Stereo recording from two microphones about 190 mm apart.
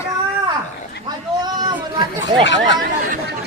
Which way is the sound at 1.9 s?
25° right (ahead or behind).